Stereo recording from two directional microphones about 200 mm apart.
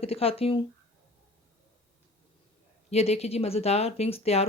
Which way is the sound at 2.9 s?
30° left (ahead or behind).